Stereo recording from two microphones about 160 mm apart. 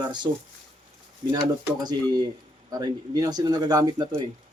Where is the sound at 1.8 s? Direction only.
25° right (ahead or behind).